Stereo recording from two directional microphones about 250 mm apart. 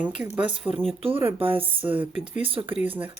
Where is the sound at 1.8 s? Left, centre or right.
Centre.